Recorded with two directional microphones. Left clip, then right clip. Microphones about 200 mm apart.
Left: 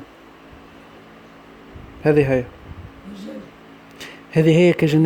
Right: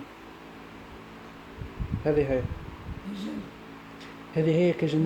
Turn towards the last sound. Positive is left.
turn(degrees=50)  # may be behind; listen again after turning